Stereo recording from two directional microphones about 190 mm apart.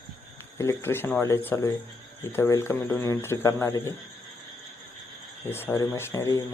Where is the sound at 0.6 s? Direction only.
15° left (ahead or behind).